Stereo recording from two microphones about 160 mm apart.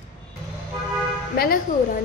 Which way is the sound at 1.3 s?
70° left (ahead or behind).